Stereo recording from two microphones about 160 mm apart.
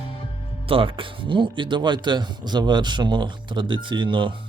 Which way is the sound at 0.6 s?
35° right (ahead or behind).